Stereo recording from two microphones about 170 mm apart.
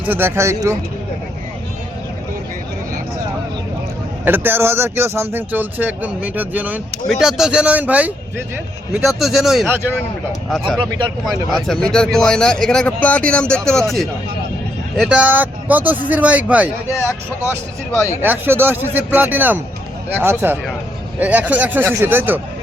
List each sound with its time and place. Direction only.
0.0 s speech: 10° right (ahead or behind)
4.3 s a man's voice: 10° right (ahead or behind)
10.8 s speech: 30° right (ahead or behind)
11.3 s a man's voice: centre (ahead or behind)
18.2 s speech: 10° right (ahead or behind)